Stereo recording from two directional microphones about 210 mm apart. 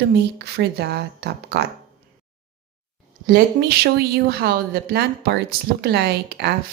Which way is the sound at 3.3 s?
50° right (ahead or behind).